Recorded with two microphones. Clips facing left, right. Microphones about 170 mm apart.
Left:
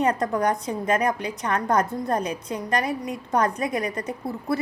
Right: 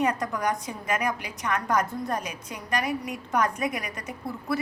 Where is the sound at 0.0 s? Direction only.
30° left (ahead or behind).